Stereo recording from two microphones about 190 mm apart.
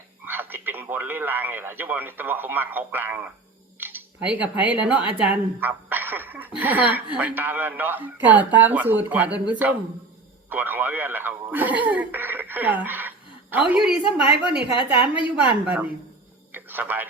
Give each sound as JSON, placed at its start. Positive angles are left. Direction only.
{"t": 0.3, "sound": "speech", "side_deg": -10}
{"t": 14.9, "sound": "a woman's voice", "side_deg": 25}
{"t": 15.4, "sound": "speech", "side_deg": -5}
{"t": 16.5, "sound": "a sound", "side_deg": -10}